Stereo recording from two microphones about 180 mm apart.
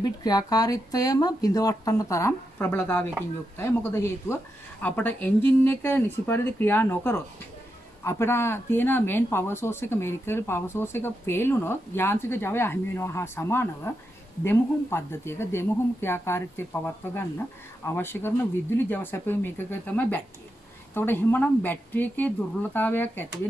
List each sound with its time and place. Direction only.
0.0 s speech: 20° left (ahead or behind)
20.9 s speech: 10° left (ahead or behind)